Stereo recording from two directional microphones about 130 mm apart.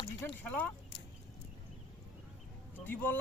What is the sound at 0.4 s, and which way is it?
Speech, 10° left (ahead or behind).